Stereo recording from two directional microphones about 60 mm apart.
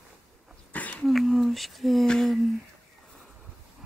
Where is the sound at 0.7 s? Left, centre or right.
Left.